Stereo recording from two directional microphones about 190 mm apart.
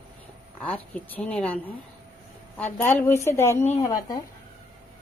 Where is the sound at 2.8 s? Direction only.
10° left (ahead or behind).